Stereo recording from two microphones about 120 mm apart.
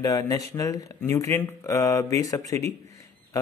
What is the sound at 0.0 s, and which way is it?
Speech, 30° left (ahead or behind).